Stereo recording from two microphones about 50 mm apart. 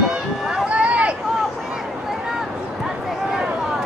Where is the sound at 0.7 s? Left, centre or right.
Right.